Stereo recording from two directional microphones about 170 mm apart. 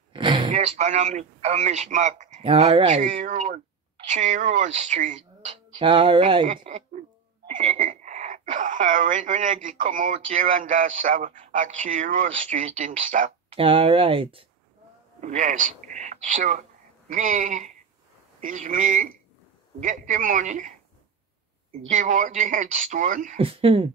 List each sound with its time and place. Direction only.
0.1 s a sound: 30° right (ahead or behind)
0.5 s a man's voice: 40° right (ahead or behind)
5.8 s speech: 30° right (ahead or behind)
6.4 s speech: 50° right (ahead or behind)
13.6 s speech: 30° right (ahead or behind)
15.1 s a man's voice: 45° right (ahead or behind)
21.8 s a man's voice: 50° right (ahead or behind)
23.3 s speech: 35° right (ahead or behind)